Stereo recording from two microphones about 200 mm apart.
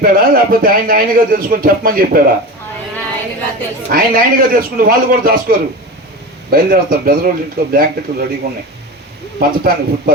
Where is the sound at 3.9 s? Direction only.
45° right (ahead or behind).